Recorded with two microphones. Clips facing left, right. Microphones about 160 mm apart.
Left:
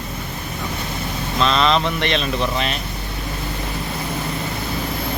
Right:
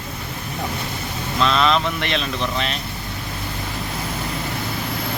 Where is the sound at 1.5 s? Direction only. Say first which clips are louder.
Even; 5° right (ahead or behind).